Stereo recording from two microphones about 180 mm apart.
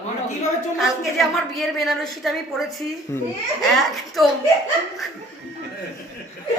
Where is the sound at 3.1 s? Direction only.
15° left (ahead or behind).